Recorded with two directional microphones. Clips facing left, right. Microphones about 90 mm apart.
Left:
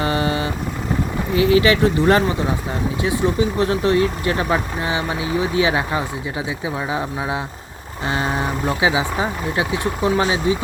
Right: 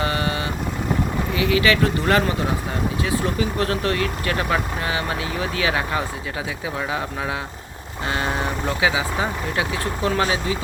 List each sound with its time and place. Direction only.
0.0 s vehicle: 30° left (ahead or behind)
1.4 s speech: 30° left (ahead or behind)